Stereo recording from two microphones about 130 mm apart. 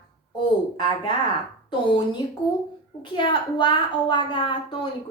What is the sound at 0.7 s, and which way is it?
A woman's voice, 35° left (ahead or behind).